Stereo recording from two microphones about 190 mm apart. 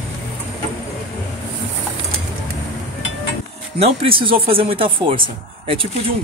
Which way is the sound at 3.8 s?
30° right (ahead or behind).